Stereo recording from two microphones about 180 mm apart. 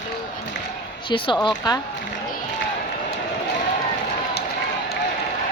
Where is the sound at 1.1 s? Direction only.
25° left (ahead or behind).